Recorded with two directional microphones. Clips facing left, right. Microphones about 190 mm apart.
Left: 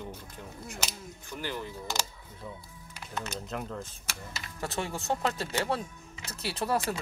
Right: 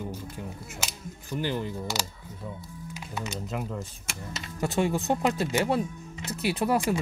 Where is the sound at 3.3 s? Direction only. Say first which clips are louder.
Right 5 dB; 5° right (ahead or behind).